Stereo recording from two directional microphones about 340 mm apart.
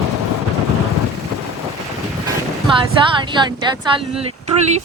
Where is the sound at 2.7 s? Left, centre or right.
Centre.